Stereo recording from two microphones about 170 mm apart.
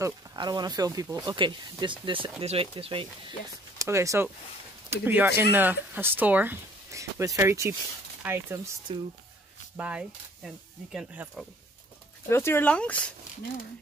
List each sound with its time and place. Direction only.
0.0 s speech: 25° right (ahead or behind)
3.7 s speech: 20° right (ahead or behind)
8.9 s speech: 30° right (ahead or behind)
9.8 s speech: 5° right (ahead or behind)
12.3 s speech: 15° left (ahead or behind)